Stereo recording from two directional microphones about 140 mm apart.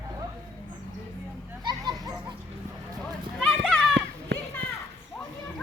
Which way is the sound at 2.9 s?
Centre (ahead or behind).